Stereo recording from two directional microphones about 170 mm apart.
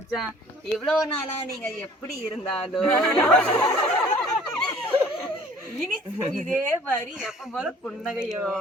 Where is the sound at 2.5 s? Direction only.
5° left (ahead or behind).